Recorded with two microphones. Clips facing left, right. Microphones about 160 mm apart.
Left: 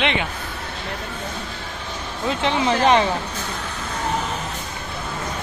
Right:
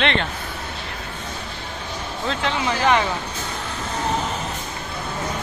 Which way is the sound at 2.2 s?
20° left (ahead or behind).